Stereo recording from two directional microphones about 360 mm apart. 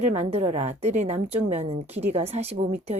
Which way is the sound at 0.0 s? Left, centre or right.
Centre.